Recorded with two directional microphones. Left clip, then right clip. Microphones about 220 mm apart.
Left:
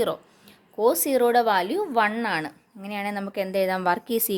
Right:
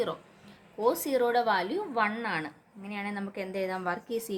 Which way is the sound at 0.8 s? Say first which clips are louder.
Left 6 dB; 45° left (ahead or behind).